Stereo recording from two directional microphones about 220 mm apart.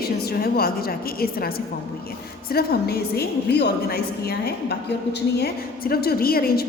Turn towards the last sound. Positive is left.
turn(degrees=45)  # may be behind; listen again after turning